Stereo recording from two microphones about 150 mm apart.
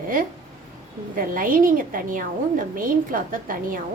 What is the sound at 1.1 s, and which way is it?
A woman's voice, 65° right (ahead or behind).